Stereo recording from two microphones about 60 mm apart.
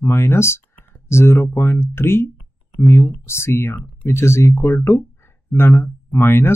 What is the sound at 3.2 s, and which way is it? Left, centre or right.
Speech, left.